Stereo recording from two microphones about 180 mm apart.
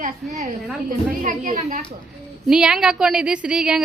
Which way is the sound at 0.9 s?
45° right (ahead or behind).